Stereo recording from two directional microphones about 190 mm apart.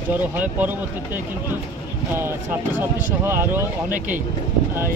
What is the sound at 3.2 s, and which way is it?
Speech, 10° right (ahead or behind).